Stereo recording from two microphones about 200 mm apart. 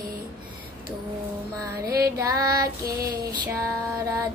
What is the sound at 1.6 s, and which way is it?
Female singing, 15° right (ahead or behind).